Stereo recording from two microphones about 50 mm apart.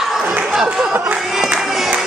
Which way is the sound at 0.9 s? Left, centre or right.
Right.